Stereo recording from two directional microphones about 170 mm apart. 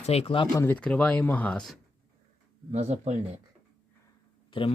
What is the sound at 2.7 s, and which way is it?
Speech, 45° right (ahead or behind).